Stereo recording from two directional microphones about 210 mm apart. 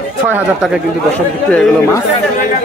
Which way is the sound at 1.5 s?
10° left (ahead or behind).